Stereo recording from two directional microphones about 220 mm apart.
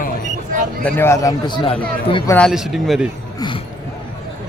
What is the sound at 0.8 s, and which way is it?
Speech, 10° left (ahead or behind).